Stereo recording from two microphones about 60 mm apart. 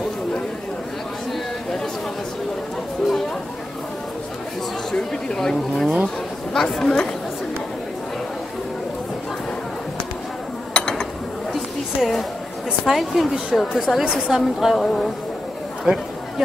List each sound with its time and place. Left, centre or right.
4.9 s speech: centre
10.7 s mechanisms: centre
11.5 s a sound: centre
12.8 s a woman's voice: centre
14.8 s speech: centre
15.9 s speech: centre